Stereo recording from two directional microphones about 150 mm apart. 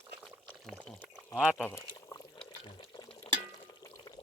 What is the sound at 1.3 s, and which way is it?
Speech, 5° right (ahead or behind).